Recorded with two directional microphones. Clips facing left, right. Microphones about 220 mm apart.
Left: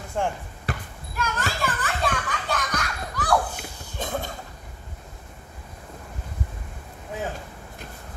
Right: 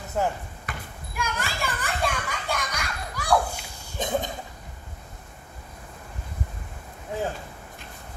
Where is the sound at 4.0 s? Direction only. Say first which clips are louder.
Right 3 dB; 20° right (ahead or behind).